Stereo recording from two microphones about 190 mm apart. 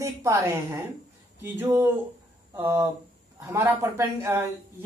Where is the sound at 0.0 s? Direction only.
15° right (ahead or behind).